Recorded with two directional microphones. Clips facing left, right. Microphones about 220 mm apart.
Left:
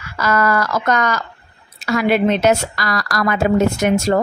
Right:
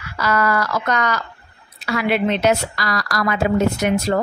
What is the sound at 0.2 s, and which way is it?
Speech, 45° left (ahead or behind).